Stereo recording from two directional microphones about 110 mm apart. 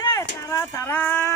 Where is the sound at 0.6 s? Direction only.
20° left (ahead or behind).